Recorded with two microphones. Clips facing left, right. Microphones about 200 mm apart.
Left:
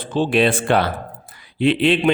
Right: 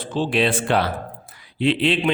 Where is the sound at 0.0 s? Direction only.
55° left (ahead or behind).